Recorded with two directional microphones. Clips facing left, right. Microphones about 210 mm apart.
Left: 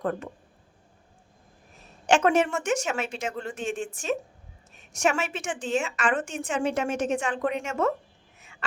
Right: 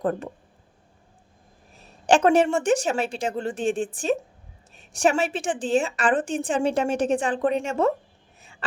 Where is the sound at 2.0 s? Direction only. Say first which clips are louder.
Right 4 dB; 35° right (ahead or behind).